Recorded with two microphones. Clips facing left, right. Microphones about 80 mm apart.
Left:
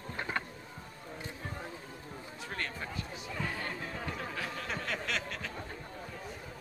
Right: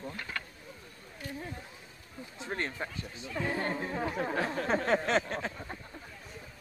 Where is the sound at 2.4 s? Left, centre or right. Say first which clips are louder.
Right 4 dB; right.